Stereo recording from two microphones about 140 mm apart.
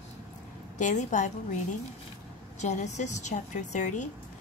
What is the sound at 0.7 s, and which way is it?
Speech, 60° left (ahead or behind).